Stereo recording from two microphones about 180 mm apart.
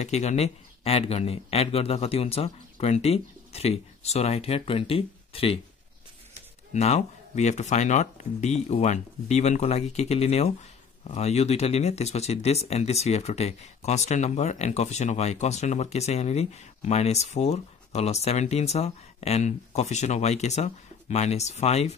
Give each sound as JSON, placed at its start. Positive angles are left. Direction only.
{"t": 0.0, "sound": "speech", "side_deg": 40}
{"t": 6.7, "sound": "speech", "side_deg": 40}